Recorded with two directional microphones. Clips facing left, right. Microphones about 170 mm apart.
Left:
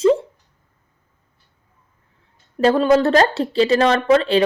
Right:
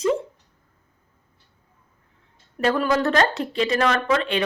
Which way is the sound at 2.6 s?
25° left (ahead or behind).